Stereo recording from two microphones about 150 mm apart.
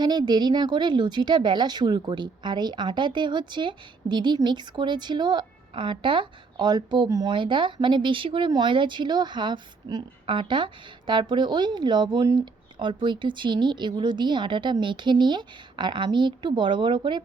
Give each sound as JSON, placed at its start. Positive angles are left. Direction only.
{"t": 0.0, "sound": "a woman's voice", "side_deg": -30}